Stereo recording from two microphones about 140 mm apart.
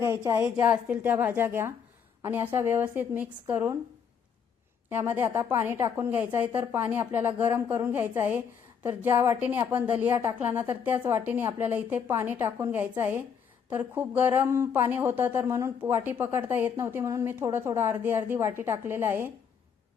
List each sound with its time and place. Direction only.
0.0 s speech: 15° right (ahead or behind)
4.9 s speech: 15° right (ahead or behind)